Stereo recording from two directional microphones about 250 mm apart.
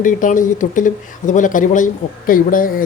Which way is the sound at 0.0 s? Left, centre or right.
Left.